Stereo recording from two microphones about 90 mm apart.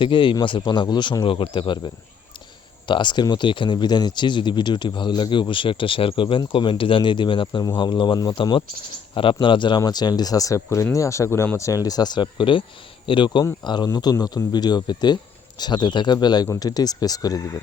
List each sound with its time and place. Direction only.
0.0 s speech: 65° left (ahead or behind)
0.6 s speech: 55° left (ahead or behind)
7.4 s speech: 45° left (ahead or behind)
7.8 s speech: 60° left (ahead or behind)
9.1 s speech: 70° left (ahead or behind)
13.9 s speech: 45° left (ahead or behind)